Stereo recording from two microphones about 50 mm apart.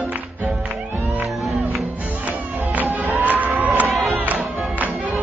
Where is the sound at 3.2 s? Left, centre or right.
Right.